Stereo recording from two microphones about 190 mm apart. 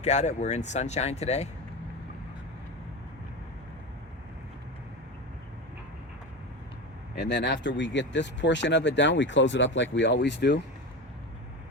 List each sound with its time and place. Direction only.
0.0 s speech: 35° left (ahead or behind)
7.2 s speech: 65° left (ahead or behind)